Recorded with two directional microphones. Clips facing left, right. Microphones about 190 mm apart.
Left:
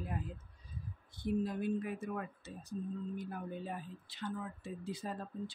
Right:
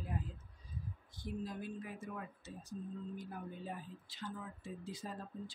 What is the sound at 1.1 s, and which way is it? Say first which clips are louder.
Speech: left 8 dB; 60° left (ahead or behind).